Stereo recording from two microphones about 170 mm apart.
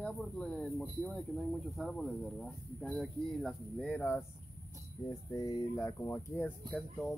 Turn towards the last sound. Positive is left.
turn(degrees=10)  # may be behind; listen again after turning